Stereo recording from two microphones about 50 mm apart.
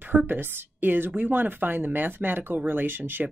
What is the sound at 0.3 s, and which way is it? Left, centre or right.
Speech, right.